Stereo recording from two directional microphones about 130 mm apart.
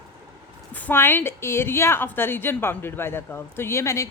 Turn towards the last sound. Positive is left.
turn(degrees=20)  # may be behind; listen again after turning